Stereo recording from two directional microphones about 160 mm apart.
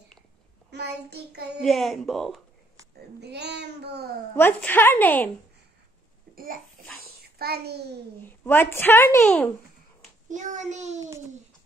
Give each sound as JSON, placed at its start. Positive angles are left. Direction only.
{"t": 0.7, "sound": "child singing", "side_deg": -90}
{"t": 1.6, "sound": "speech", "side_deg": 0}
{"t": 3.2, "sound": "child singing", "side_deg": -90}
{"t": 4.4, "sound": "a woman's voice", "side_deg": 15}
{"t": 6.3, "sound": "a child's voice", "side_deg": -65}
{"t": 7.3, "sound": "child singing", "side_deg": -80}
{"t": 8.2, "sound": "a woman's voice", "side_deg": 15}
{"t": 10.3, "sound": "child singing", "side_deg": -50}